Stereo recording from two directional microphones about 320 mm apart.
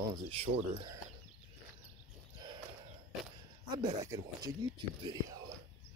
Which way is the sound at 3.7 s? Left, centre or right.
Centre.